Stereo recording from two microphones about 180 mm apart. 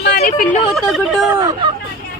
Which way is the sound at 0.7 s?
Centre (ahead or behind).